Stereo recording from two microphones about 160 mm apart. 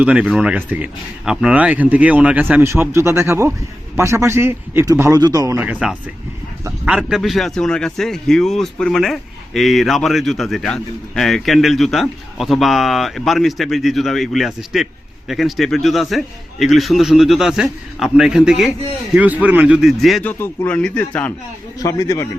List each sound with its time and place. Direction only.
0.0 s speech: 10° right (ahead or behind)
6.7 s speech: 5° right (ahead or behind)
20.2 s speech: 15° left (ahead or behind)
21.8 s a man's voice: 20° left (ahead or behind)